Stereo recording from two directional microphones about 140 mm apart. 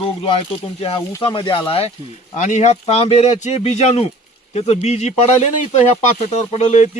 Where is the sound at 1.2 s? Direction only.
35° left (ahead or behind).